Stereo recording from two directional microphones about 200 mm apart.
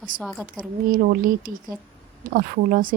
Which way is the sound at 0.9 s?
45° right (ahead or behind).